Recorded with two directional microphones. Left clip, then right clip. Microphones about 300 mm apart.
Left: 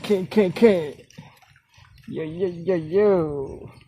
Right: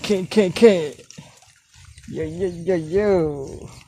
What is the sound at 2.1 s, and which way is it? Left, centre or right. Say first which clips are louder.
Speech: right 1 dB; centre.